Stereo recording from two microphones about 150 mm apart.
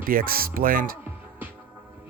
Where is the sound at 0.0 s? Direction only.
75° right (ahead or behind).